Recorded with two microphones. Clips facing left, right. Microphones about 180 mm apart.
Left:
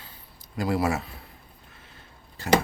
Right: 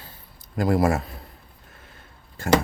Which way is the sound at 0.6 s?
50° right (ahead or behind).